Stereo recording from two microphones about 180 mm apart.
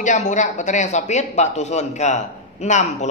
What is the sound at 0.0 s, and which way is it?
A woman's voice, 40° left (ahead or behind).